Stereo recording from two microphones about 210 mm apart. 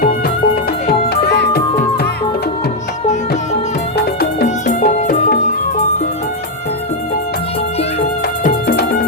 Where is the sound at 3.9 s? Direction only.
50° left (ahead or behind).